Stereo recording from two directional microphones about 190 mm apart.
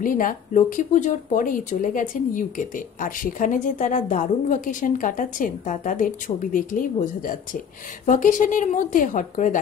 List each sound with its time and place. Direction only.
0.0 s speech: 45° left (ahead or behind)